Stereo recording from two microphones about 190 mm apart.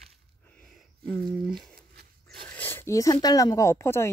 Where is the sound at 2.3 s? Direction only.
10° left (ahead or behind).